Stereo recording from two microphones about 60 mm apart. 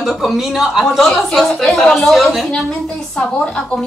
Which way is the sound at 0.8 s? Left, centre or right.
Centre.